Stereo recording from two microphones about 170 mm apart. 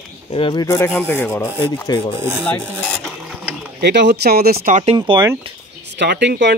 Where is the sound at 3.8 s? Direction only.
85° right; by 4.7 s 65° right (ahead or behind).